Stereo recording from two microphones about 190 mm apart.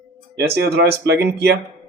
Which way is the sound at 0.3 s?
55° right (ahead or behind).